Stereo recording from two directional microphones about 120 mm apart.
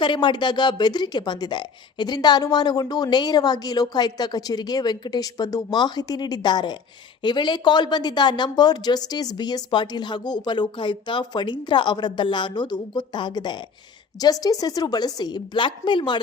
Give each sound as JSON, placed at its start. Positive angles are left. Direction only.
{"t": 0.0, "sound": "a woman's voice", "side_deg": 40}